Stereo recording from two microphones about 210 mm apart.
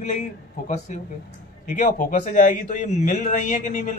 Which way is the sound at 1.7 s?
40° left (ahead or behind).